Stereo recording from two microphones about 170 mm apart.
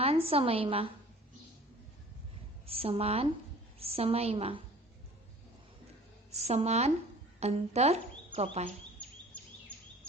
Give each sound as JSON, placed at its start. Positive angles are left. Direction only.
{"t": 0.0, "sound": "a woman's voice", "side_deg": -35}
{"t": 2.6, "sound": "a woman's voice", "side_deg": -35}
{"t": 6.3, "sound": "a woman's voice", "side_deg": -40}
{"t": 9.0, "sound": "a sound", "side_deg": 5}